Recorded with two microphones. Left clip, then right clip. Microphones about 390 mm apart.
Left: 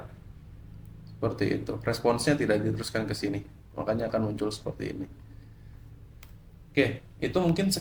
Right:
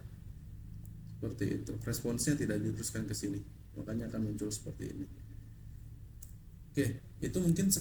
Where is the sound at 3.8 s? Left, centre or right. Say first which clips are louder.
Left 13 dB; left.